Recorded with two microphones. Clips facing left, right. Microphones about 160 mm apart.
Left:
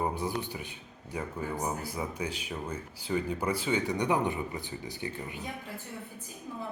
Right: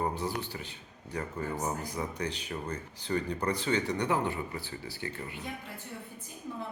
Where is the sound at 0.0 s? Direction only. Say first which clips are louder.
Left 1 dB; 10° left (ahead or behind).